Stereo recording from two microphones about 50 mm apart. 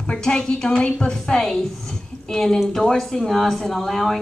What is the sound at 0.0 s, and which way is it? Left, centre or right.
A woman's voice, centre.